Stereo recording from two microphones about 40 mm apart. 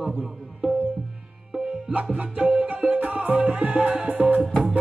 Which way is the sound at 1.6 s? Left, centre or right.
Centre.